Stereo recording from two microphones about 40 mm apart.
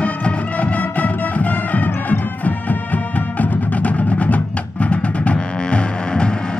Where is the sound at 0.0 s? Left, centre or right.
Left.